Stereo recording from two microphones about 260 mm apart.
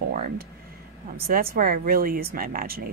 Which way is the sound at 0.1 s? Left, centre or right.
Right.